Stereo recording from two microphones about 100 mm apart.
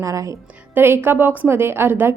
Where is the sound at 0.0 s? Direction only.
30° right (ahead or behind).